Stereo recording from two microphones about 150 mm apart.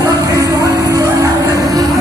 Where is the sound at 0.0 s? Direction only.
25° right (ahead or behind).